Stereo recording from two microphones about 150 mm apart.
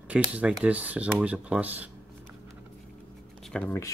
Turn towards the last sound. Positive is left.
turn(degrees=10)  # may be behind; listen again after turning